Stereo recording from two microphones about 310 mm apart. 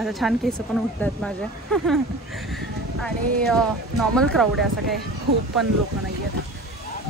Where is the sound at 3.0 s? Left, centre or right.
Centre.